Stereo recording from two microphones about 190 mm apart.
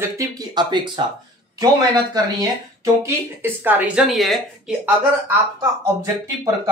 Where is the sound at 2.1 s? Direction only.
20° right (ahead or behind).